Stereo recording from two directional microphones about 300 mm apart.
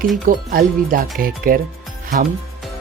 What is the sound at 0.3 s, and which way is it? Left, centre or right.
Speech, right.